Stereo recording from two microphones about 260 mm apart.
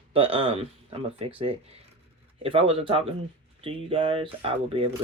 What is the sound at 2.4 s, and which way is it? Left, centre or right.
Speech, right.